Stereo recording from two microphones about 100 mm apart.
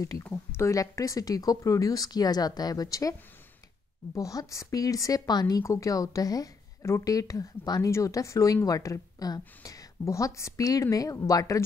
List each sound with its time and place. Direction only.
0.0 s speech: 35° left (ahead or behind)